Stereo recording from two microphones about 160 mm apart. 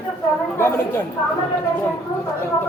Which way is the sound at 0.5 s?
15° left (ahead or behind).